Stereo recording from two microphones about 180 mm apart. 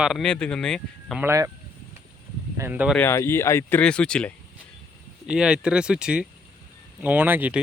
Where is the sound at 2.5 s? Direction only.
10° right (ahead or behind).